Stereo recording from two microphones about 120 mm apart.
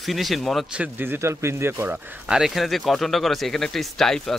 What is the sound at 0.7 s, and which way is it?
Speech, 15° right (ahead or behind).